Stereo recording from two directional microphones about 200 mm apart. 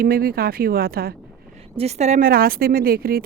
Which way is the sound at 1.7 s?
35° right (ahead or behind).